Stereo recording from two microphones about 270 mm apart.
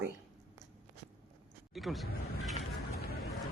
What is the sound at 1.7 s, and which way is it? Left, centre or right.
Speech, centre.